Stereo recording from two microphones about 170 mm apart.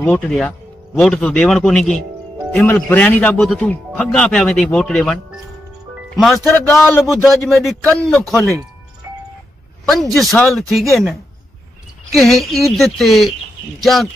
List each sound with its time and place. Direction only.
0.0 s speech: 5° left (ahead or behind)
6.0 s music: centre (ahead or behind)
6.3 s speech: 15° left (ahead or behind)
7.2 s speech: centre (ahead or behind)
10.1 s speech: centre (ahead or behind)